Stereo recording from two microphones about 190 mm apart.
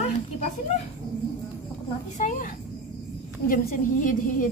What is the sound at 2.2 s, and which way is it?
Speech, 40° left (ahead or behind).